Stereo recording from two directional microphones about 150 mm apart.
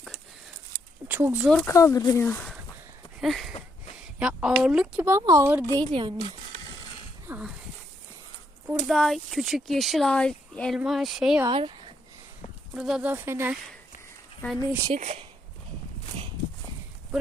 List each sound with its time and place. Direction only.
1.0 s speech: 10° right (ahead or behind)
1.6 s speech: 20° left (ahead or behind)
3.2 s a sound: centre (ahead or behind)
4.2 s speech: 5° right (ahead or behind)
5.0 s speech: 20° right (ahead or behind)
5.8 s speech: 30° right (ahead or behind)
7.3 s dog: 10° right (ahead or behind)
8.9 s speech: centre (ahead or behind)
11.4 s a sound: 35° right (ahead or behind)
12.7 s speech: 5° right (ahead or behind)
14.4 s speech: centre (ahead or behind)
14.9 s speech: 45° right (ahead or behind)